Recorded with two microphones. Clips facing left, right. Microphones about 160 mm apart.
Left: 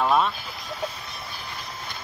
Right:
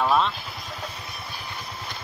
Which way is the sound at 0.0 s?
5° left (ahead or behind).